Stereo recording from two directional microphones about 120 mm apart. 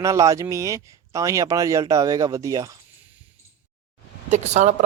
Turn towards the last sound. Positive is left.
turn(degrees=-80)